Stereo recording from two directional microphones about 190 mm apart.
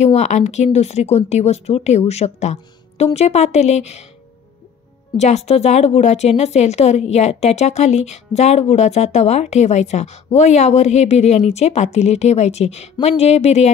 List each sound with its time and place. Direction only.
0.0 s a woman's voice: 35° left (ahead or behind)
5.1 s a woman's voice: 35° left (ahead or behind)